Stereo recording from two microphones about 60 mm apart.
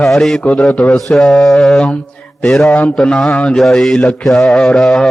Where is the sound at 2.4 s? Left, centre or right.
Centre.